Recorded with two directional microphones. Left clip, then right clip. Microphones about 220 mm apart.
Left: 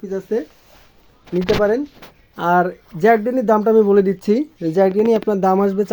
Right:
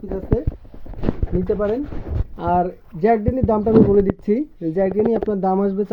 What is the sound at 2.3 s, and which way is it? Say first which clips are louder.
Speech: left 3 dB; 25° left (ahead or behind).